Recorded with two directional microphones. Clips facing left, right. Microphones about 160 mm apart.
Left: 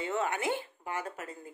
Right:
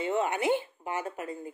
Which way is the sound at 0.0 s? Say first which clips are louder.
Right 4 dB; 15° right (ahead or behind).